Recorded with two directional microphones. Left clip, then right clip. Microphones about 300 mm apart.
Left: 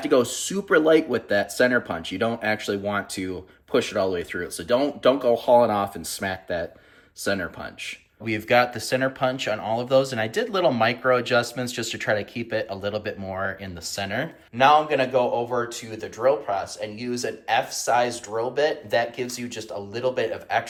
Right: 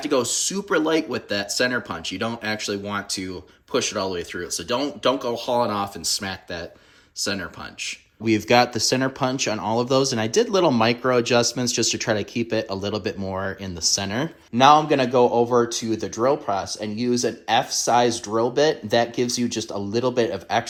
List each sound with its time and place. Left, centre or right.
0.0 s speech: centre
8.2 s speech: centre